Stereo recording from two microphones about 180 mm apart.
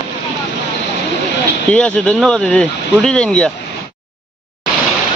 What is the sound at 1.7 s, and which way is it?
Speech, 5° left (ahead or behind).